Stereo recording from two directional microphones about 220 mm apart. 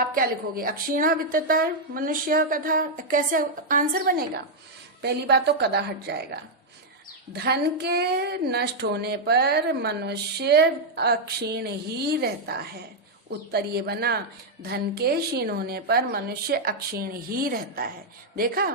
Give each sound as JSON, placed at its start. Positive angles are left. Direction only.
{"t": 0.1, "sound": "a woman's voice", "side_deg": -40}